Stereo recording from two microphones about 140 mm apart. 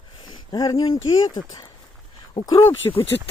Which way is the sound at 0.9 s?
40° left (ahead or behind).